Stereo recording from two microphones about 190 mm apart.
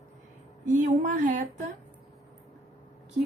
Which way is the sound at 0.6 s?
40° right (ahead or behind).